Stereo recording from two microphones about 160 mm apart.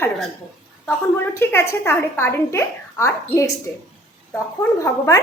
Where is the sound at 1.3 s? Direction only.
15° left (ahead or behind).